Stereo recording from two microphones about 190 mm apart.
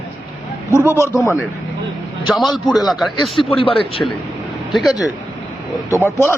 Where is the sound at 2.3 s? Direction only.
Centre (ahead or behind).